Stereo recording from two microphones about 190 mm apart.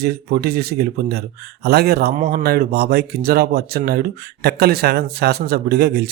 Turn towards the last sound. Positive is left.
turn(degrees=-55)  # may be behind; listen again after turning